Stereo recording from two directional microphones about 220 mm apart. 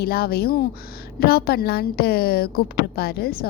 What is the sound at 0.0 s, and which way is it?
A woman's voice, 45° left (ahead or behind).